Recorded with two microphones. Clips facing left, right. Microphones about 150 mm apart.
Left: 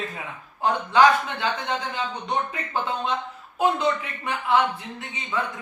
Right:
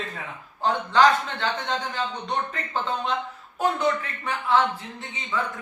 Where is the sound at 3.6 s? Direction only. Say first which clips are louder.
Left 1 dB; centre (ahead or behind).